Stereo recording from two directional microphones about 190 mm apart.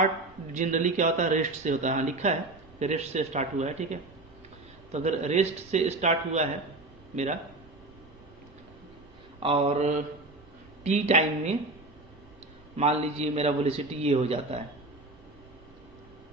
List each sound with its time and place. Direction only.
0.5 s a man's voice: 40° right (ahead or behind)
9.4 s a man's voice: 30° right (ahead or behind)
12.7 s a man's voice: 35° right (ahead or behind)